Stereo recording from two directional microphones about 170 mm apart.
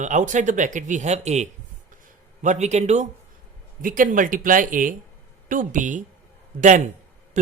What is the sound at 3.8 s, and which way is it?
Speech, 55° right (ahead or behind).